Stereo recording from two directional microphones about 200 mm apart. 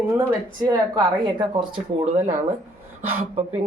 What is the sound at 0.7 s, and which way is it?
Speech, 20° right (ahead or behind).